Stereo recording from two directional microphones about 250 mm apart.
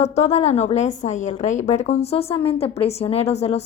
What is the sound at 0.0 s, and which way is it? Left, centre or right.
A woman's voice, left.